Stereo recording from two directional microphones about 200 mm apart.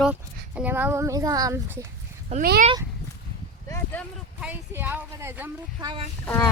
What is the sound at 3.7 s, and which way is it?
Speech, 10° left (ahead or behind).